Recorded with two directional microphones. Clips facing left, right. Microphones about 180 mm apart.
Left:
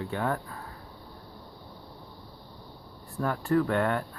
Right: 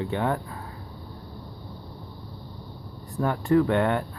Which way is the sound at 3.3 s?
20° right (ahead or behind).